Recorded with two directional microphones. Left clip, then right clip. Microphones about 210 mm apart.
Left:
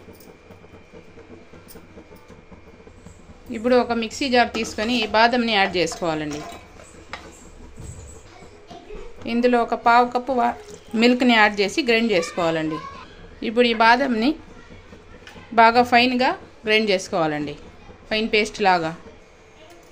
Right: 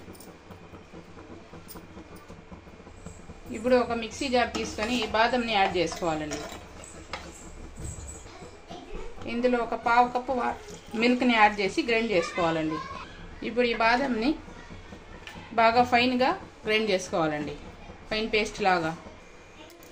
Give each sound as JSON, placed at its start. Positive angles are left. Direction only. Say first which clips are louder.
{"t": 3.5, "sound": "a woman's voice", "louder": "left 5 dB", "side_deg": 45}
{"t": 9.2, "sound": "a woman's voice", "louder": "left 7 dB", "side_deg": 50}
{"t": 15.5, "sound": "a woman's voice", "louder": "left 7 dB", "side_deg": 40}